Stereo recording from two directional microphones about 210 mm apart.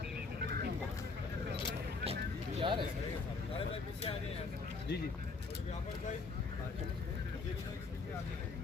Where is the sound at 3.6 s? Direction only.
25° left (ahead or behind).